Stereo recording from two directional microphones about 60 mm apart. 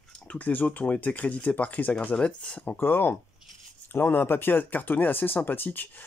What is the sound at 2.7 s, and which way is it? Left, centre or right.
Speech, left.